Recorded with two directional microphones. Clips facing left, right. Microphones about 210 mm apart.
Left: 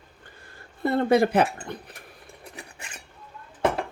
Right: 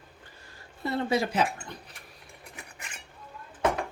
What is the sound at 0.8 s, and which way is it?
Speech, 55° left (ahead or behind).